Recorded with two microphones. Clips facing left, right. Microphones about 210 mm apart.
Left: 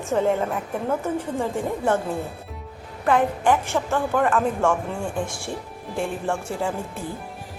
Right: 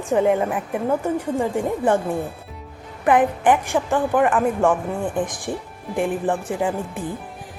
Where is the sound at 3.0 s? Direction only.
15° right (ahead or behind).